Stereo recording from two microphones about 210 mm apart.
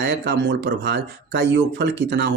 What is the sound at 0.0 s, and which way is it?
Speech, 55° right (ahead or behind).